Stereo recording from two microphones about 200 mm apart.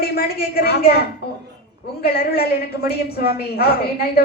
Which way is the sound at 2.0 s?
50° left (ahead or behind).